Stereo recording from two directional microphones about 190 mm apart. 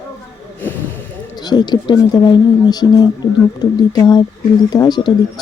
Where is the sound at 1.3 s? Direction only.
20° left (ahead or behind).